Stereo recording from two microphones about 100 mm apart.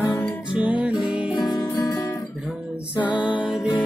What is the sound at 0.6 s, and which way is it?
Music, 15° right (ahead or behind).